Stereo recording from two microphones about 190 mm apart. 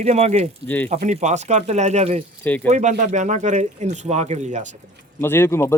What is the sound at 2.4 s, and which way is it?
Speech, 10° left (ahead or behind).